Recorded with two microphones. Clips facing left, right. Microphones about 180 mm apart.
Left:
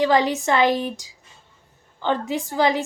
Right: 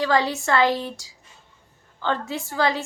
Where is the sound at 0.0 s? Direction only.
20° left (ahead or behind).